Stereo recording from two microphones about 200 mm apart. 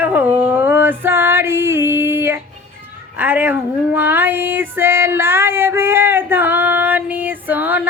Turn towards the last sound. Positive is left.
turn(degrees=-10)  # may be behind; listen again after turning